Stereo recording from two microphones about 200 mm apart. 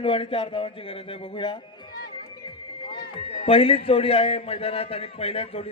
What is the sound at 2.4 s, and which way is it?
Music, 25° left (ahead or behind).